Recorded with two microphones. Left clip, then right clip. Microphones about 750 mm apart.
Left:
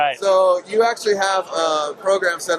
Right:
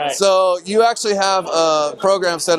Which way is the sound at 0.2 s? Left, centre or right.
Right.